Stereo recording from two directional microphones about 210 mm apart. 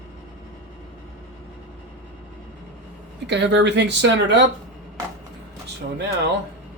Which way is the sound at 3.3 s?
55° right (ahead or behind).